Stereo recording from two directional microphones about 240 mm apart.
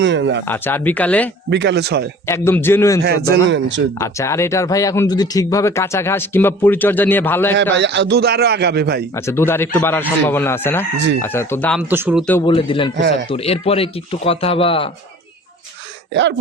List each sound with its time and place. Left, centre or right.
0.0 s a man's voice: right
0.4 s speech: centre
1.5 s a man's voice: right
2.2 s speech: centre
3.5 s a man's voice: right
3.9 s speech: centre
7.5 s a man's voice: right
9.1 s speech: centre
10.9 s a man's voice: right
11.2 s speech: centre
11.8 s speech: centre
12.5 s a man's voice: left